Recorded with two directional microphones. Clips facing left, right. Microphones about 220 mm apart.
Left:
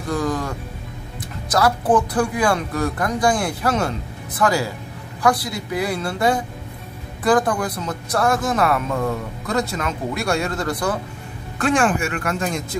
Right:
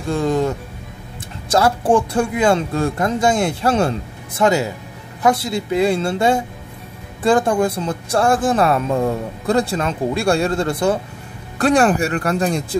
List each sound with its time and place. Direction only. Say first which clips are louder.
0.1 s speech: right 5 dB; 25° right (ahead or behind)